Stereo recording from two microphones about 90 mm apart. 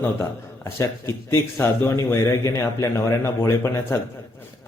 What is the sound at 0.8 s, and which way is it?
Speech, 30° left (ahead or behind).